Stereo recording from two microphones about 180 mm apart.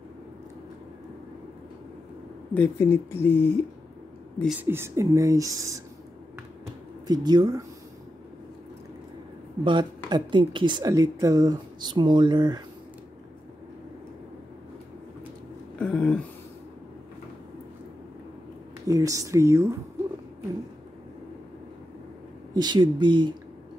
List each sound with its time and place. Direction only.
2.5 s speech: 10° left (ahead or behind)
4.6 s speech: 15° right (ahead or behind)
6.6 s a sound: 25° right (ahead or behind)
9.7 s a woman's voice: 25° right (ahead or behind)
15.8 s a sound: 5° left (ahead or behind)
18.9 s speech: 20° right (ahead or behind)
22.5 s a woman's voice: 25° right (ahead or behind)